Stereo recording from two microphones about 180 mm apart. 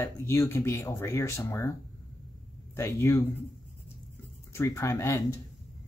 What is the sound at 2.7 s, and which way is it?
Speech, 15° left (ahead or behind).